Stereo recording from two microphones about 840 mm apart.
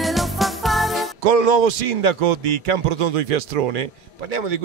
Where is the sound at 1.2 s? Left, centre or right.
Right.